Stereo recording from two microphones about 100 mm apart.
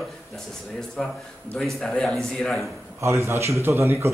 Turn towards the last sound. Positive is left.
turn(degrees=-25)  # may be behind; listen again after turning